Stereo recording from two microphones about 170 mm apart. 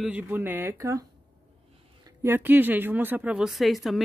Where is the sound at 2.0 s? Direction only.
15° right (ahead or behind).